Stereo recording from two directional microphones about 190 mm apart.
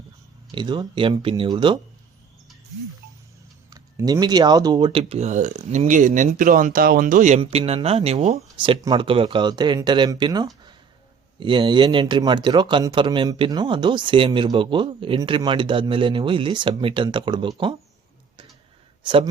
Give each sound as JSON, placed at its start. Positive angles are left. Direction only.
{"t": 0.5, "sound": "speech", "side_deg": -25}
{"t": 3.7, "sound": "speech", "side_deg": -20}
{"t": 19.0, "sound": "speech", "side_deg": -25}